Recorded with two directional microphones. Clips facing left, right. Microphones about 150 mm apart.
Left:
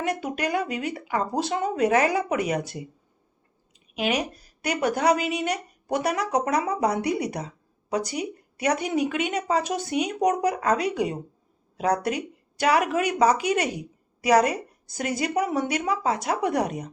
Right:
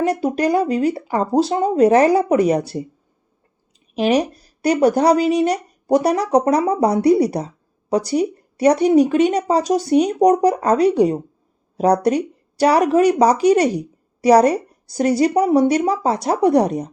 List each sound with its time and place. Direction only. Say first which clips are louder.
0.0 s speech: right 9 dB; 35° right (ahead or behind)
3.9 s speech: right 9 dB; 35° right (ahead or behind)